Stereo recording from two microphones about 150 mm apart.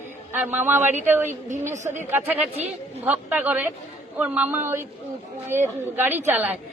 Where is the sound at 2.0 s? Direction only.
10° right (ahead or behind).